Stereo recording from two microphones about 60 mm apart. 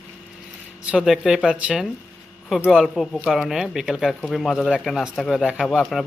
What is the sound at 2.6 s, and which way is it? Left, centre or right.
Speech, centre.